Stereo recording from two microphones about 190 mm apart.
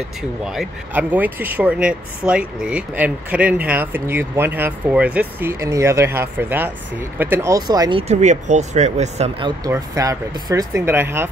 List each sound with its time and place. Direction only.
0.5 s speech: 5° right (ahead or behind); by 8.0 s 20° right (ahead or behind)
8.1 s speech: 35° right (ahead or behind)
9.7 s speech: 15° right (ahead or behind)